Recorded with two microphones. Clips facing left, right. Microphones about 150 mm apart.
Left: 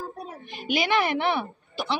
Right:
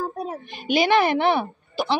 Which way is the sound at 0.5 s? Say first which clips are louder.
Right 5 dB; 30° right (ahead or behind).